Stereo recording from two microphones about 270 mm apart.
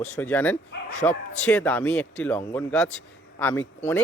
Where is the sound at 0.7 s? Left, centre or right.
Left.